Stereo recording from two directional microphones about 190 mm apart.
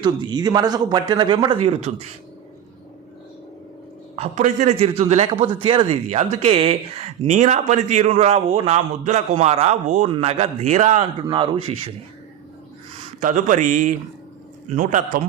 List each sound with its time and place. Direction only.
0.0 s speech: 25° right (ahead or behind)
4.1 s speech: 35° right (ahead or behind)
11.2 s speech: 25° right (ahead or behind)
13.2 s speech: 40° right (ahead or behind)